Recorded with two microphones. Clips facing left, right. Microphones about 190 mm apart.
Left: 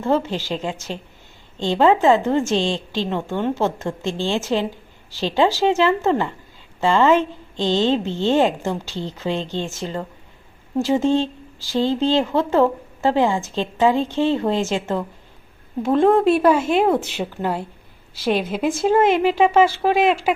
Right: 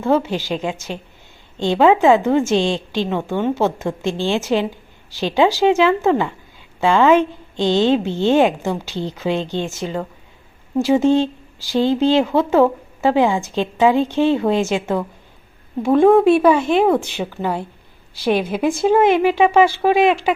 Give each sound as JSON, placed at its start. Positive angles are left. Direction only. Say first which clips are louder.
{"t": 0.0, "sound": "a woman's voice", "louder": "right 3 dB", "side_deg": -10}